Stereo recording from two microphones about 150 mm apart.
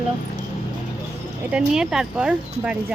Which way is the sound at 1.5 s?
5° right (ahead or behind).